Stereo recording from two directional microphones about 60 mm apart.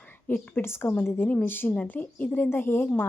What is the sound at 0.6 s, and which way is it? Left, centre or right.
A woman's voice, left.